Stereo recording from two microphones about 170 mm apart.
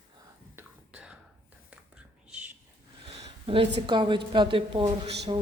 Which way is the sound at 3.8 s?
30° right (ahead or behind).